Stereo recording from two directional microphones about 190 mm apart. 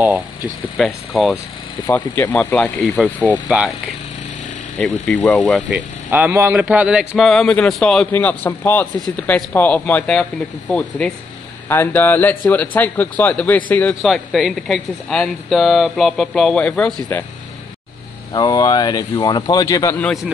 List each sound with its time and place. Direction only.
0.7 s a man's voice: centre (ahead or behind)
2.0 s speech: 20° left (ahead or behind)
2.3 s a man's voice: 5° left (ahead or behind)
4.7 s a man's voice: 5° left (ahead or behind)
5.7 s a man's voice: 10° right (ahead or behind)
18.3 s speech: 20° left (ahead or behind)